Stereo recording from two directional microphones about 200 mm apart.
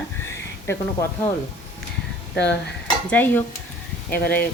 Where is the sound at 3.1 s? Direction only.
10° left (ahead or behind).